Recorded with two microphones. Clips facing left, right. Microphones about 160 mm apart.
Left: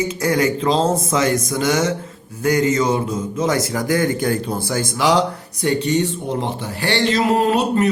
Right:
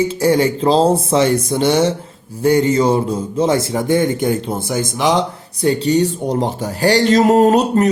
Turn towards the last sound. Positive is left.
turn(degrees=-40)  # may be behind; listen again after turning